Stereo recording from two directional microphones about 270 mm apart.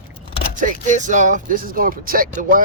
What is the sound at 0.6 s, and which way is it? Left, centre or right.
Speech, right.